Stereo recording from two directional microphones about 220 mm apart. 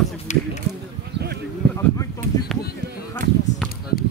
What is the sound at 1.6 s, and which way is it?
Speech, 50° right (ahead or behind).